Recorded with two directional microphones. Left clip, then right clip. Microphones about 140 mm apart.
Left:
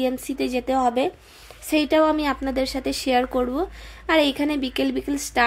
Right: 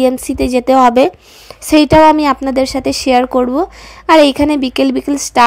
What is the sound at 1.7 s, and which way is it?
A woman's voice, 50° right (ahead or behind).